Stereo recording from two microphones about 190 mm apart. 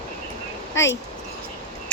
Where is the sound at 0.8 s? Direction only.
80° left.